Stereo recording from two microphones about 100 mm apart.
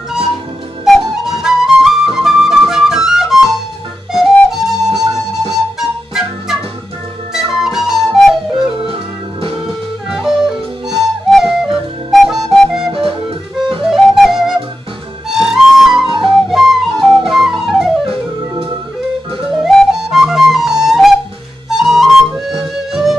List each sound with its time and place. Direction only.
0.8 s flute: centre (ahead or behind)
8.7 s music: 65° right (ahead or behind)
10.0 s music: 5° right (ahead or behind)
15.2 s flute: 5° right (ahead or behind)
16.1 s flute: 55° right (ahead or behind)
16.4 s flute: 5° right (ahead or behind)
19.7 s music: 5° left (ahead or behind)
20.0 s flute: 5° right (ahead or behind)
22.5 s music: 5° right (ahead or behind)